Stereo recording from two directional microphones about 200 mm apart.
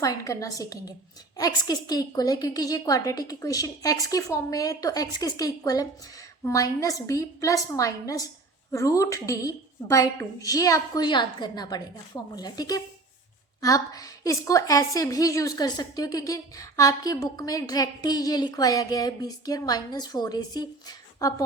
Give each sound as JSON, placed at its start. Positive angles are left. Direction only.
{"t": 0.0, "sound": "a woman's voice", "side_deg": 15}